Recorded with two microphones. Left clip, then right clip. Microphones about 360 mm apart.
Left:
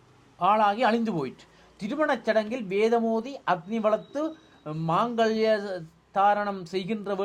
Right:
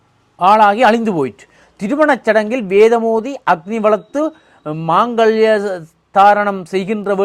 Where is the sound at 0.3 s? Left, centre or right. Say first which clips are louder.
Right 13 dB; right.